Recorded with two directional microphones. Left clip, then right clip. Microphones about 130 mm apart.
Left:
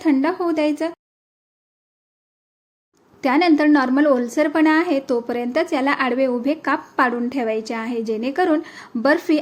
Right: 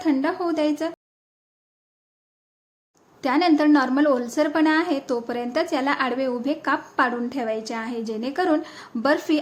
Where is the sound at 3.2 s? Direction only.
25° left (ahead or behind).